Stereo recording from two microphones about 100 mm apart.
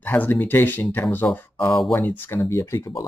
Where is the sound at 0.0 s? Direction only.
20° left (ahead or behind).